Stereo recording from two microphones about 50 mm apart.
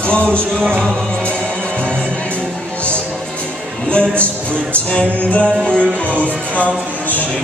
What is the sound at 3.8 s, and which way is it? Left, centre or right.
Music, left.